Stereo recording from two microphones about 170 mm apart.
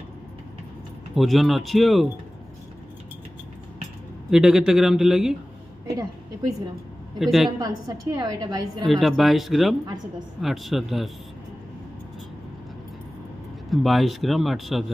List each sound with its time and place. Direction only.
1.1 s speech: centre (ahead or behind)
4.3 s speech: 5° right (ahead or behind)
5.9 s a woman's voice: 20° right (ahead or behind)
7.2 s speech: centre (ahead or behind)
7.5 s a woman's voice: 20° right (ahead or behind)
8.8 s speech: centre (ahead or behind)
13.7 s speech: centre (ahead or behind)